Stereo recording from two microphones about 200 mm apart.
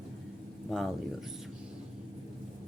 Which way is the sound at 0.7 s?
Centre (ahead or behind).